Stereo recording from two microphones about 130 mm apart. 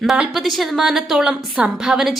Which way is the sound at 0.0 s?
5° right (ahead or behind).